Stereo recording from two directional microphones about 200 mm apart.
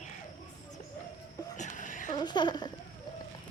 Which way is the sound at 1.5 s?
40° left (ahead or behind).